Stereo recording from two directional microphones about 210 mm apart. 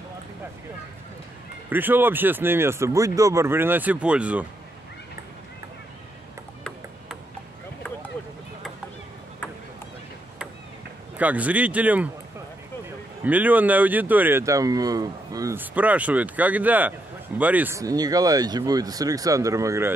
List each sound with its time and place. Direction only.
1.7 s speech: 10° right (ahead or behind)
11.1 s speech: 5° right (ahead or behind)
13.2 s speech: 5° right (ahead or behind)